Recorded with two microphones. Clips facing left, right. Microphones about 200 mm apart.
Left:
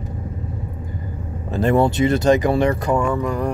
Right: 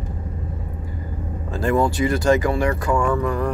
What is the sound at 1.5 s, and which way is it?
Speech, 20° left (ahead or behind).